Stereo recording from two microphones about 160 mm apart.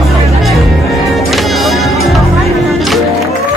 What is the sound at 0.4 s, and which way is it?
Music, centre (ahead or behind).